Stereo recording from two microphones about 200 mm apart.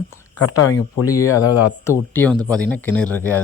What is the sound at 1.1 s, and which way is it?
Speech, 15° left (ahead or behind).